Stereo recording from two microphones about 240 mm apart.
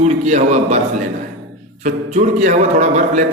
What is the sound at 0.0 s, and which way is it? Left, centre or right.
Speech, right.